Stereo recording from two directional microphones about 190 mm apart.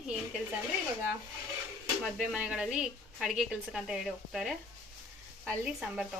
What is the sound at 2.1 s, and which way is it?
A woman's voice, 5° right (ahead or behind).